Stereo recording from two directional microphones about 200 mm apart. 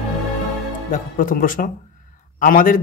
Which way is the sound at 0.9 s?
40° left (ahead or behind).